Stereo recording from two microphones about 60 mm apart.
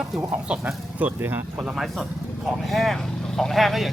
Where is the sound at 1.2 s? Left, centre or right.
Right.